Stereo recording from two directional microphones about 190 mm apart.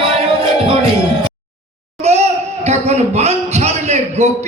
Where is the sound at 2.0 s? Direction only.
35° right (ahead or behind).